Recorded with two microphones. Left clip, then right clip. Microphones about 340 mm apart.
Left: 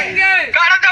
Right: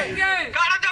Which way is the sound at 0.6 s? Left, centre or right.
Centre.